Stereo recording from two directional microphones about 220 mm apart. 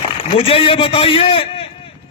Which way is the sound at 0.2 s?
25° left (ahead or behind).